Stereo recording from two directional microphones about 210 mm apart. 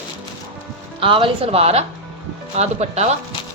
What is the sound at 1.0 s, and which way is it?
A woman's voice, 25° right (ahead or behind).